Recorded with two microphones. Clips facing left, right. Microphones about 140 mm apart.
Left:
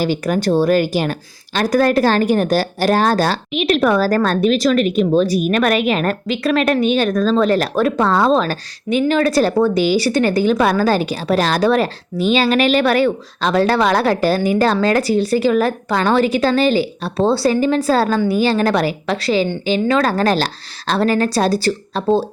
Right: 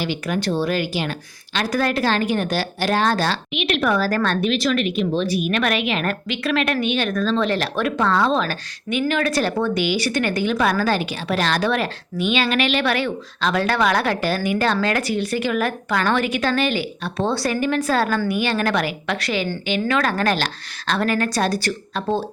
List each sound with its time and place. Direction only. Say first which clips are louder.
0.0 s a woman's voice: left 6 dB; 40° left (ahead or behind)